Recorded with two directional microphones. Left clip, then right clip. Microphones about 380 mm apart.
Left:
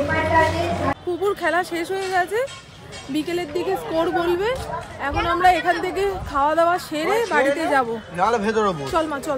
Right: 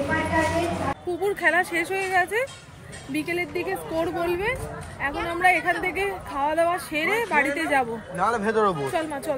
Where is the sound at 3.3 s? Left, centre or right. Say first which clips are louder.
Left 5 dB; left.